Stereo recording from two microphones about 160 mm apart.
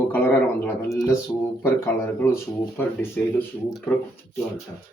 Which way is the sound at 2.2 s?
15° left (ahead or behind).